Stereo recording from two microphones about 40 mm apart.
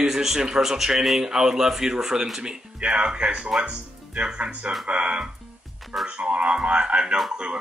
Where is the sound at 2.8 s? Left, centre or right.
Right.